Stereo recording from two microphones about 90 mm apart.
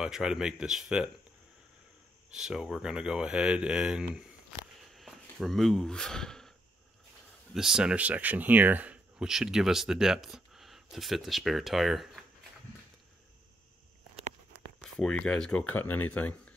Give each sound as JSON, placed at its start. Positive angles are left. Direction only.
{"t": 0.0, "sound": "speech", "side_deg": -5}
{"t": 2.3, "sound": "speech", "side_deg": -5}
{"t": 7.5, "sound": "speech", "side_deg": -5}
{"t": 9.2, "sound": "speech", "side_deg": -5}
{"t": 15.0, "sound": "speech", "side_deg": 10}